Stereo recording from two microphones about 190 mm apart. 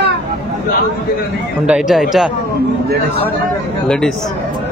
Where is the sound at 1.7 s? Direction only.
5° right (ahead or behind).